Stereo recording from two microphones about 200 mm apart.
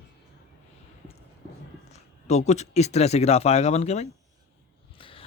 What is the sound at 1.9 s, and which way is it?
Speech, 35° left (ahead or behind).